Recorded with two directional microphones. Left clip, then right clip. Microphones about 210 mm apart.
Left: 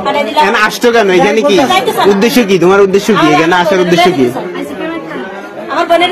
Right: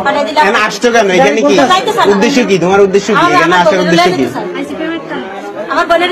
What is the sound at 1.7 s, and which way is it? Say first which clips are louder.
Speech: right 1 dB; 15° left (ahead or behind).